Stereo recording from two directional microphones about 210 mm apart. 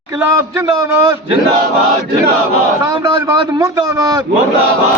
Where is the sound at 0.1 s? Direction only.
15° right (ahead or behind).